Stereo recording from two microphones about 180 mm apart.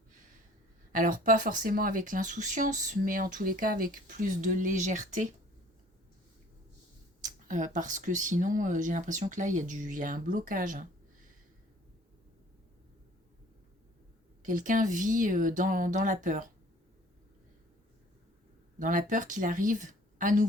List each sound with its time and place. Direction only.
0.9 s speech: 50° right (ahead or behind)
7.2 s speech: 45° right (ahead or behind)
14.4 s speech: 45° right (ahead or behind)
18.8 s speech: 50° right (ahead or behind)